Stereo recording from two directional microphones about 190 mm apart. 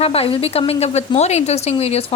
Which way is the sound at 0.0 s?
30° left (ahead or behind).